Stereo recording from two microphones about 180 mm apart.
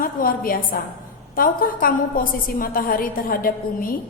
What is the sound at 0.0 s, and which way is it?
A woman's voice, 50° left (ahead or behind).